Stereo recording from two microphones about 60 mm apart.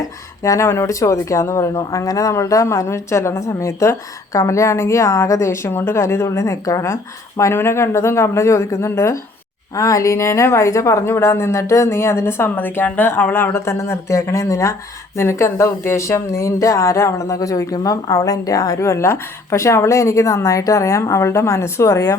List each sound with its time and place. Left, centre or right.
0.6 s speech: left
4.3 s speech: left
6.8 s speech: left
9.7 s speech: left